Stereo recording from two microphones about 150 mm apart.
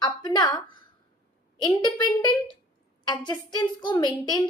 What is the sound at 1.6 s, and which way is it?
A woman's voice, 30° left (ahead or behind).